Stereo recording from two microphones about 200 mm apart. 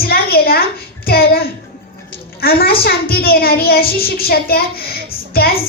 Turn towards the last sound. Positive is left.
turn(degrees=50)  # may be behind; listen again after turning